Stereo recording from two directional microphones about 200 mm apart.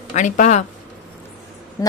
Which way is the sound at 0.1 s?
40° left (ahead or behind).